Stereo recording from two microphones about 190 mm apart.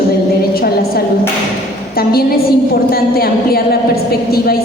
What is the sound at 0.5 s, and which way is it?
A woman's voice, 55° left (ahead or behind).